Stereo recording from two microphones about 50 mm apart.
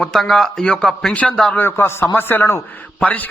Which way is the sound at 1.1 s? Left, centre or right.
Left.